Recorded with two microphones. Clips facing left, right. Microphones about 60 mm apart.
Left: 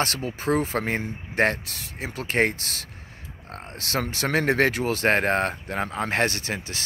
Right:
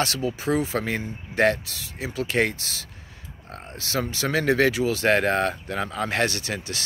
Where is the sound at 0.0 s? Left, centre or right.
Left.